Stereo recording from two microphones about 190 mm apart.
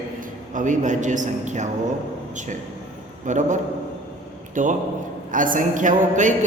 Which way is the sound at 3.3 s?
40° right (ahead or behind).